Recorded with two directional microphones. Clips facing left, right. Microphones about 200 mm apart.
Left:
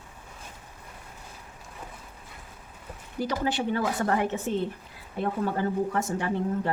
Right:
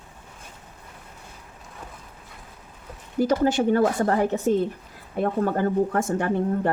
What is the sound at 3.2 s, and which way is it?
Speech, 45° right (ahead or behind).